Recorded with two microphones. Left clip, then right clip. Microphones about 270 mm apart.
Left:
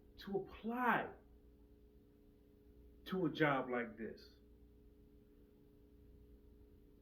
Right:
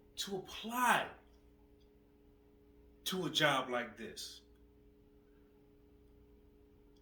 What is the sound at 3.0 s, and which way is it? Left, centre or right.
Speech, centre.